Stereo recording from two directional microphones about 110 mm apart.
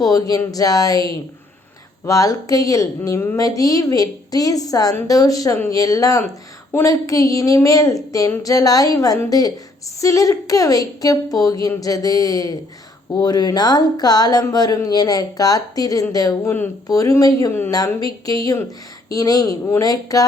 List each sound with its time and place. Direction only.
0.0 s speech: 35° left (ahead or behind)